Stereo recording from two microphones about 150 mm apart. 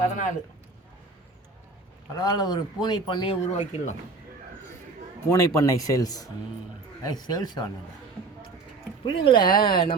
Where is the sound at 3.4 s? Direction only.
45° left (ahead or behind).